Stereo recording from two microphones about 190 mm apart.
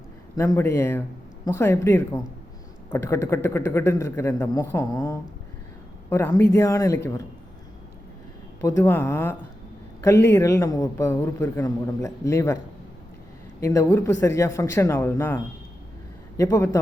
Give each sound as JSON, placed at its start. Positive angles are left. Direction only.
{"t": 0.3, "sound": "a man's voice", "side_deg": 15}
{"t": 8.6, "sound": "a man's voice", "side_deg": 15}
{"t": 13.6, "sound": "a man's voice", "side_deg": 15}
{"t": 16.4, "sound": "a man's voice", "side_deg": 15}